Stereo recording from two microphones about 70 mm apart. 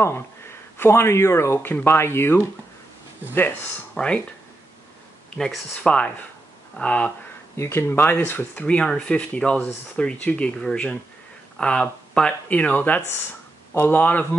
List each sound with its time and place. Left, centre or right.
0.7 s speech: left
3.9 s speech: centre
5.9 s speech: centre
7.5 s speech: left
8.6 s speech: centre